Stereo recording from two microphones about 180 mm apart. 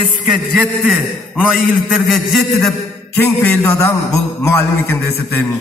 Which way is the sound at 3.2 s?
10° left (ahead or behind).